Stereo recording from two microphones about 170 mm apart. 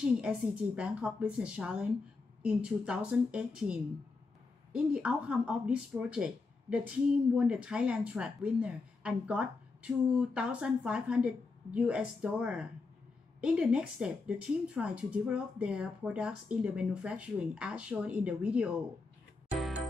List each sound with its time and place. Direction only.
0.2 s speech: 5° right (ahead or behind)